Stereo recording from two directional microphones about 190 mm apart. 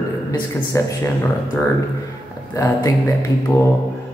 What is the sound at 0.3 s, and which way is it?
Speech, 15° left (ahead or behind).